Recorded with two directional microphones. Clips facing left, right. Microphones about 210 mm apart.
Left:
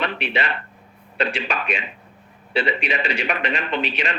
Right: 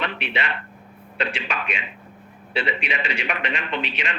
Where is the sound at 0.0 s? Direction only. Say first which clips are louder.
Left 3 dB; 40° left (ahead or behind).